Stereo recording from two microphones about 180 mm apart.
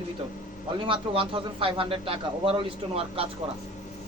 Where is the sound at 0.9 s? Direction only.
30° right (ahead or behind).